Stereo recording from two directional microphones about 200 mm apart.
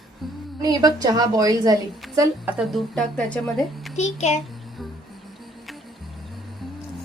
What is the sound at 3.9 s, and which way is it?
Speech, 35° left (ahead or behind).